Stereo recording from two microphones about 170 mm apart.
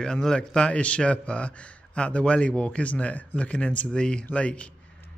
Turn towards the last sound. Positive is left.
turn(degrees=5)  # may be behind; listen again after turning